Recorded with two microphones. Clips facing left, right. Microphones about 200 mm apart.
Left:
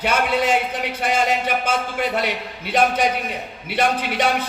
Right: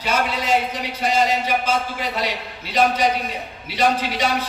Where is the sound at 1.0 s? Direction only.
55° left (ahead or behind).